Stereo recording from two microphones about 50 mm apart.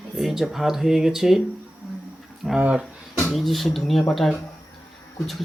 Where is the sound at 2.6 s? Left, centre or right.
Right.